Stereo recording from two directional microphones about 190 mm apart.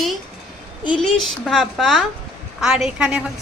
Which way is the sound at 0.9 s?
Centre (ahead or behind).